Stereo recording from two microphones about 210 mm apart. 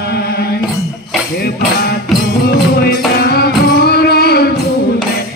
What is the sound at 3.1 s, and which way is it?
Music, 50° left (ahead or behind).